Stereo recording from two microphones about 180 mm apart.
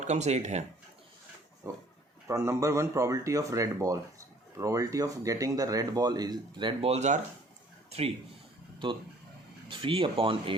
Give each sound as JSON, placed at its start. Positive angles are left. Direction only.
{"t": 0.0, "sound": "speech", "side_deg": -40}
{"t": 1.7, "sound": "a man's voice", "side_deg": -15}
{"t": 9.6, "sound": "speech", "side_deg": -30}